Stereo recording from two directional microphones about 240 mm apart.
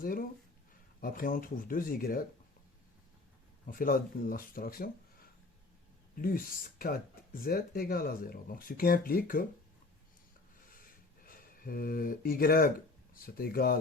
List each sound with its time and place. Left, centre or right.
0.0 s speech: left
3.7 s speech: left
10.7 s a sound: left
13.1 s speech: left